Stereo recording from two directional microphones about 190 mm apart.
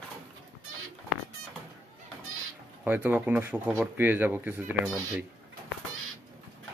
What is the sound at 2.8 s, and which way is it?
A man's voice, 10° right (ahead or behind).